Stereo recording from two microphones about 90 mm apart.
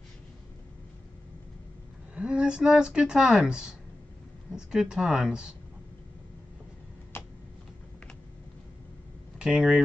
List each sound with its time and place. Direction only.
2.1 s speech: 10° right (ahead or behind)
7.1 s a sound: 25° left (ahead or behind)
9.4 s speech: 10° right (ahead or behind)